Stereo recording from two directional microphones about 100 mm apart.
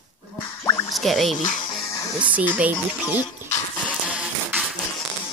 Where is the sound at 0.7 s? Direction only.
30° left (ahead or behind).